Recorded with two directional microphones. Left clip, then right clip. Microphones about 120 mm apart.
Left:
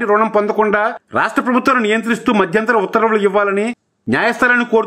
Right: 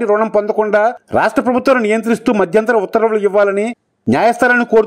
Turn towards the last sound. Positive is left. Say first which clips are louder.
# right 2 dB
turn(degrees=-30)  # may be behind; listen again after turning